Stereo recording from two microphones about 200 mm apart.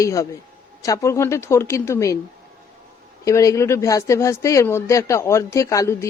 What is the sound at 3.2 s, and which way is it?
Speech, 15° left (ahead or behind).